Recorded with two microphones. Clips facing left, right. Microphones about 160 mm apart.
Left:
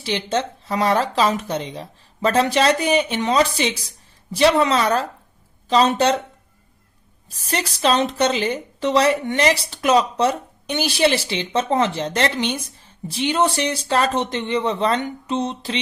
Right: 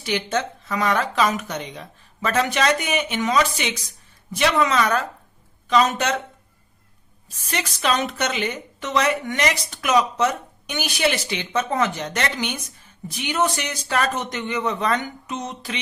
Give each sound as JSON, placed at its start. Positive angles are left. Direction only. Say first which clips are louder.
{"t": 0.0, "sound": "a woman's voice", "louder": "left 1 dB", "side_deg": 30}
{"t": 7.3, "sound": "a woman's voice", "louder": "left 3 dB", "side_deg": 35}